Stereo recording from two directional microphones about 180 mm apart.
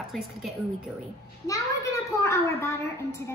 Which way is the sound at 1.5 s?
15° left (ahead or behind).